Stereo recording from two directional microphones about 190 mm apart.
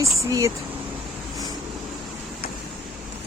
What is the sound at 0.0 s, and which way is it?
Speech, 15° right (ahead or behind).